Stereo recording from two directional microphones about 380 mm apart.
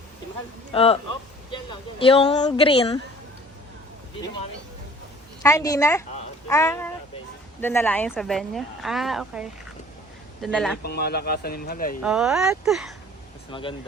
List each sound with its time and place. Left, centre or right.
0.7 s a woman's voice: centre
5.4 s a woman's voice: centre
10.8 s speech: left
12.0 s a woman's voice: centre
13.5 s a woman's voice: centre